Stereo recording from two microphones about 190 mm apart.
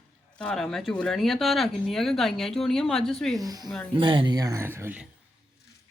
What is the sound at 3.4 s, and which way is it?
Speech, 20° right (ahead or behind).